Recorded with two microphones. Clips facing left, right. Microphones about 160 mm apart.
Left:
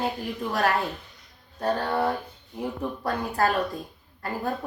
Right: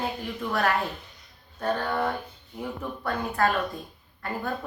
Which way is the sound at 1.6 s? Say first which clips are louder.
Left 2 dB; 35° left (ahead or behind).